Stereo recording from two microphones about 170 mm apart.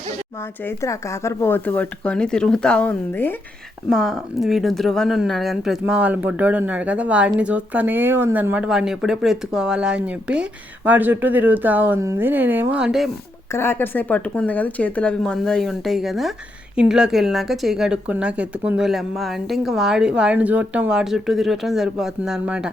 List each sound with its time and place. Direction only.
0.6 s speech: 15° left (ahead or behind)
3.8 s speech: centre (ahead or behind)
13.5 s speech: 15° left (ahead or behind); by 22.7 s 5° right (ahead or behind)